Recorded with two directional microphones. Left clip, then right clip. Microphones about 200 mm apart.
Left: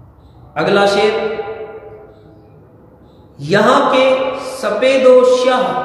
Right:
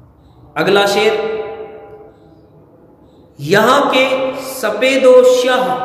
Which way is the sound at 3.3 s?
60° right (ahead or behind).